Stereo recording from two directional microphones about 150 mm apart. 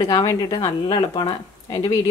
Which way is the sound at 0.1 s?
25° left (ahead or behind).